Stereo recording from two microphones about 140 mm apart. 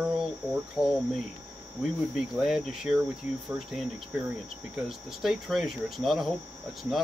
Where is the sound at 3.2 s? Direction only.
60° left (ahead or behind).